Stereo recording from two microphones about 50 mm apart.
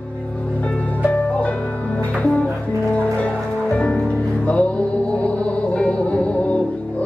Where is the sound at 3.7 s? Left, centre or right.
Left.